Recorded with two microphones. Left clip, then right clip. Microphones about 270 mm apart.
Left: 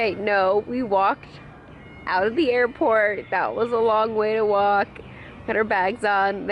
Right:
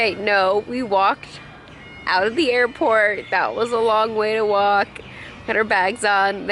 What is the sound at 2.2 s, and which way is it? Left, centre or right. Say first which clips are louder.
Speech: right 2 dB; centre.